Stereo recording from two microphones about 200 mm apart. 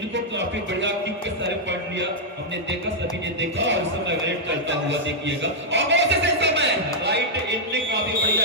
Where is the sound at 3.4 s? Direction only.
65° right (ahead or behind).